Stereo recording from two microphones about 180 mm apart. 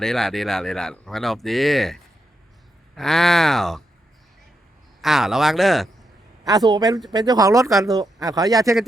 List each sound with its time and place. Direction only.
0.0 s speech: centre (ahead or behind)
4.9 s speech: centre (ahead or behind)
6.4 s speech: 20° right (ahead or behind)